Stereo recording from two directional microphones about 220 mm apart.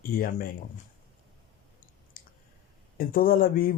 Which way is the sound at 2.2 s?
40° left (ahead or behind).